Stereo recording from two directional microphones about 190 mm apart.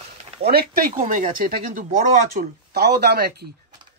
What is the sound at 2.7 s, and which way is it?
Speech, 60° right (ahead or behind).